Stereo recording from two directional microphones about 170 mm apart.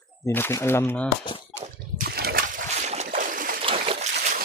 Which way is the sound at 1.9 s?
65° right (ahead or behind).